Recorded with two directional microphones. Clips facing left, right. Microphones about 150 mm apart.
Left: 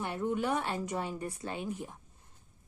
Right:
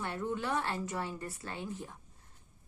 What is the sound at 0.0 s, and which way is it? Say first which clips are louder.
A woman's voice: left 3 dB; 15° left (ahead or behind).